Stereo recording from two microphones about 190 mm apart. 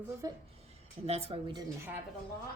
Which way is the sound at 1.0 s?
35° right (ahead or behind).